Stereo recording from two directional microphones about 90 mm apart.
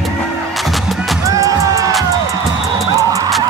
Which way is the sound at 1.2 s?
35° right (ahead or behind).